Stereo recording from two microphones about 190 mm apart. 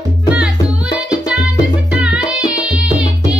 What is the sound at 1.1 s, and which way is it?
Music, 5° right (ahead or behind).